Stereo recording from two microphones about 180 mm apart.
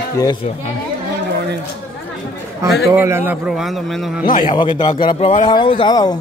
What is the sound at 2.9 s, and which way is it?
A man's voice, 10° right (ahead or behind).